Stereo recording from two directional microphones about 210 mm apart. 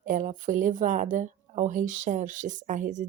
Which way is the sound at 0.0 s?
40° right (ahead or behind).